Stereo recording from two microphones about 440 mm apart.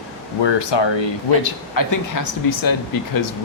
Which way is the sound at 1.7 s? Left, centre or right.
Left.